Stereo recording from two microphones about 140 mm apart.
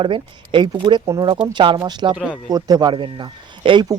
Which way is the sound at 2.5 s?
25° right (ahead or behind).